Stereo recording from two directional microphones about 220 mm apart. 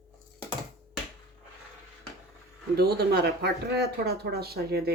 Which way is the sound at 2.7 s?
45° right (ahead or behind).